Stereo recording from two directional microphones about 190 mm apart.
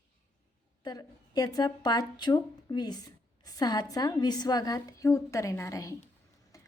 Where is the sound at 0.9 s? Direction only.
20° left (ahead or behind).